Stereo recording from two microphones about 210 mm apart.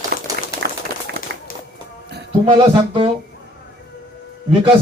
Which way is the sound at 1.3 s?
55° right (ahead or behind).